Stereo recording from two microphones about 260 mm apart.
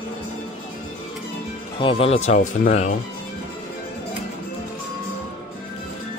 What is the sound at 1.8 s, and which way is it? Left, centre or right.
Speech, left.